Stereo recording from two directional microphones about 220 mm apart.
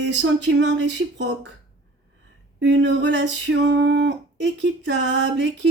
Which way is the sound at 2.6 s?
55° right (ahead or behind).